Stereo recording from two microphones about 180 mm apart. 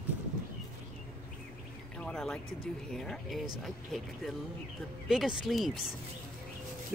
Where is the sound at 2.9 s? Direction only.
Centre (ahead or behind).